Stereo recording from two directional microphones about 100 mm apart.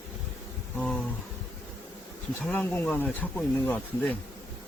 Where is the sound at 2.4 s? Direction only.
15° left (ahead or behind).